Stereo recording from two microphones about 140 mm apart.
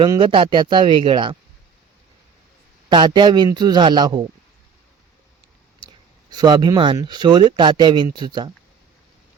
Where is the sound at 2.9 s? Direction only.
35° right (ahead or behind).